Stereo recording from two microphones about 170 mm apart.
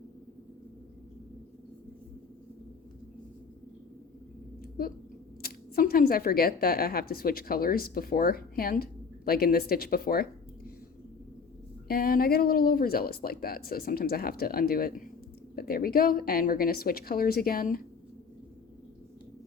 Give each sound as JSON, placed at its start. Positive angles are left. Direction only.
{"t": 5.4, "sound": "speech", "side_deg": 60}
{"t": 11.9, "sound": "speech", "side_deg": 60}